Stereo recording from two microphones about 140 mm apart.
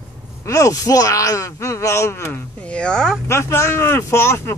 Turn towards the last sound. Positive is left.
turn(degrees=20)  # may be behind; listen again after turning